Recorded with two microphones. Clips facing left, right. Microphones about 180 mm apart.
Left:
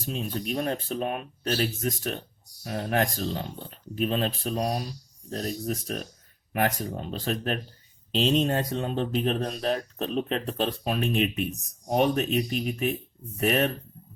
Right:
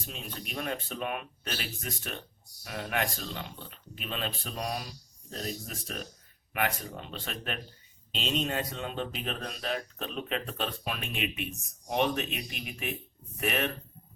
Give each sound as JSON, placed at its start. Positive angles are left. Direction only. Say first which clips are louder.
{"t": 0.0, "sound": "speech", "louder": "left 10 dB", "side_deg": 40}